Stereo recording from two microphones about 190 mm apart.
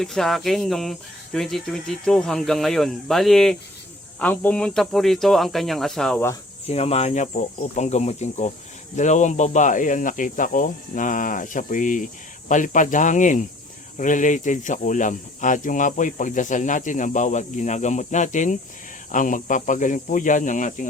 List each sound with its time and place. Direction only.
0.0 s speech: centre (ahead or behind)
6.7 s speech: 35° left (ahead or behind)